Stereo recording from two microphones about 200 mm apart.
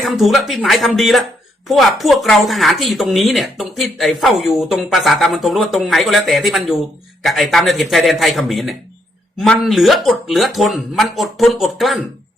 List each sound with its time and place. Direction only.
0.0 s speech: centre (ahead or behind)